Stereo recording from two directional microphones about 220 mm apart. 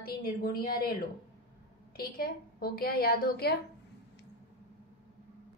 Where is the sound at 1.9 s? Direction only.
45° left (ahead or behind).